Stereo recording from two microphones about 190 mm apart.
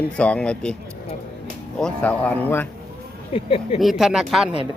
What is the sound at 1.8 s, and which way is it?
Speech, 5° left (ahead or behind).